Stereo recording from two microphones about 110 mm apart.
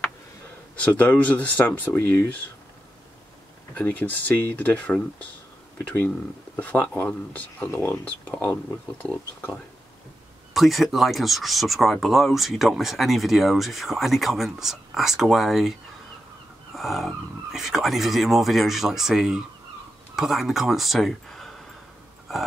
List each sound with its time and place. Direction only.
0.7 s speech: 10° left (ahead or behind)
3.7 s speech: 15° left (ahead or behind)
10.5 s speech: centre (ahead or behind)
16.7 s speech: centre (ahead or behind)